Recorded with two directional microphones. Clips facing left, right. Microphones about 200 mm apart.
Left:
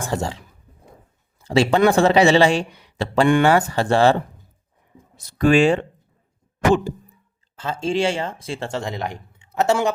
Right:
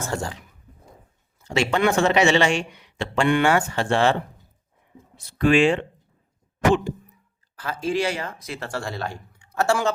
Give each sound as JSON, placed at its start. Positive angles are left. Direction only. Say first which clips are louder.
{"t": 0.0, "sound": "speech", "louder": "left 3 dB", "side_deg": 20}
{"t": 1.5, "sound": "a man's voice", "louder": "left 5 dB", "side_deg": 35}
{"t": 6.7, "sound": "throat clearing", "louder": "left 2 dB", "side_deg": 35}
{"t": 7.5, "sound": "speech", "louder": "left 2 dB", "side_deg": 25}